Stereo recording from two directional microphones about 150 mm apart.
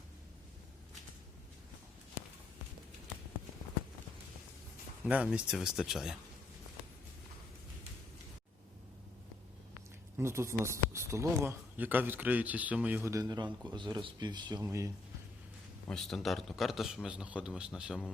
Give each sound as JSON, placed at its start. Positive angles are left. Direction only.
{"t": 5.0, "sound": "a man's voice", "side_deg": -5}
{"t": 10.2, "sound": "speech", "side_deg": -15}
{"t": 15.9, "sound": "a man's voice", "side_deg": 5}